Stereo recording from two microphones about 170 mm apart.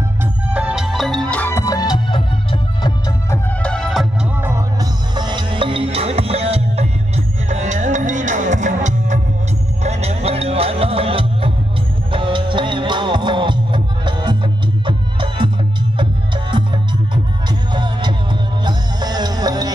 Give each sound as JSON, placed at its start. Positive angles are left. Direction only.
{"t": 0.2, "sound": "music", "side_deg": -5}
{"t": 3.3, "sound": "music", "side_deg": 5}
{"t": 4.4, "sound": "music", "side_deg": -15}
{"t": 16.5, "sound": "music", "side_deg": -25}